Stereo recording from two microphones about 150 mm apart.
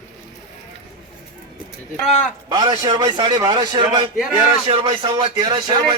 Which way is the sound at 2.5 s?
25° right (ahead or behind).